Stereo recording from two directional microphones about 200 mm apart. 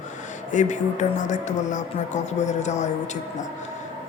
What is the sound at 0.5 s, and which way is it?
Speech, 35° left (ahead or behind).